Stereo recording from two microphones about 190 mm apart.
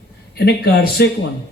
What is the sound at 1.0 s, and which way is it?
Speech, 55° left (ahead or behind).